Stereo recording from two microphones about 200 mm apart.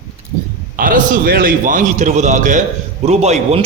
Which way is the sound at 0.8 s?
40° right (ahead or behind).